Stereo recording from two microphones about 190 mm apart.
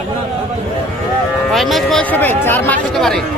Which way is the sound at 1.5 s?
Centre (ahead or behind).